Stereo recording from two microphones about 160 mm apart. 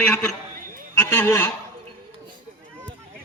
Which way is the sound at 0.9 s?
15° left (ahead or behind).